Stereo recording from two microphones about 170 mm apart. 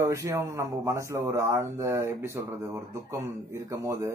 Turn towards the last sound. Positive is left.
turn(degrees=-20)  # may be behind; listen again after turning